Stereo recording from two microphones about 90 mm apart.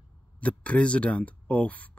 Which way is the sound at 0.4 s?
15° left (ahead or behind).